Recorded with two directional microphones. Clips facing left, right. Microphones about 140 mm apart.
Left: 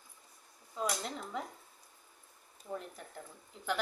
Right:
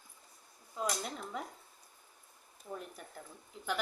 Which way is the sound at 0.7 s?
5° right (ahead or behind).